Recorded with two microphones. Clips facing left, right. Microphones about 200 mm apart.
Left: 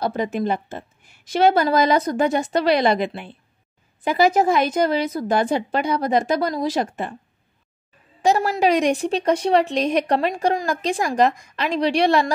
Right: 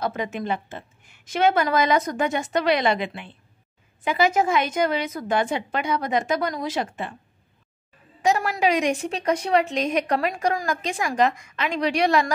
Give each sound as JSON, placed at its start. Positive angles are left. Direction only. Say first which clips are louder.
{"t": 0.0, "sound": "a woman's voice", "louder": "left 5 dB", "side_deg": 35}
{"t": 8.2, "sound": "a woman's voice", "louder": "left 3 dB", "side_deg": 30}